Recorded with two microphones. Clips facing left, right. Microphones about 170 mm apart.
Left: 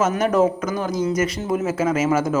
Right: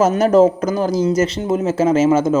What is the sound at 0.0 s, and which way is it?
A man's voice, 30° right (ahead or behind).